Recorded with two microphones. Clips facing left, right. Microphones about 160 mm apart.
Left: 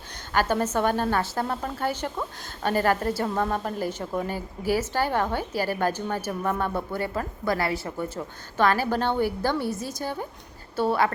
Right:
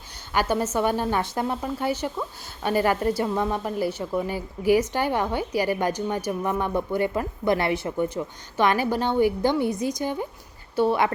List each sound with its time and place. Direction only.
0.3 s a woman's voice: 10° right (ahead or behind)